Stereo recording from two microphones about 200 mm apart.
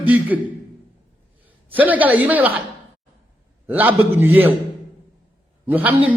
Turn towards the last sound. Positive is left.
turn(degrees=-10)  # may be behind; listen again after turning